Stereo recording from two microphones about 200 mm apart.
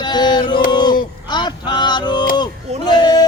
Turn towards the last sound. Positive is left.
turn(degrees=20)  # may be behind; listen again after turning